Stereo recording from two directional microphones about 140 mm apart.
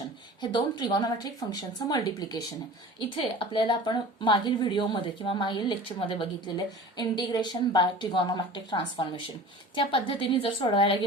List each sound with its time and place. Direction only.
0.4 s speech: 30° left (ahead or behind)
3.2 s speech: 35° left (ahead or behind)